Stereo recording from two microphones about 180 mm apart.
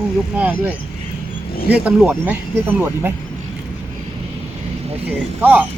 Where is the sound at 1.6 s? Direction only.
10° right (ahead or behind).